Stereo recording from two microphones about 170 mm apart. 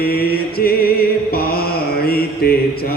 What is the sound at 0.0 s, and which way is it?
Mantra, 65° left (ahead or behind).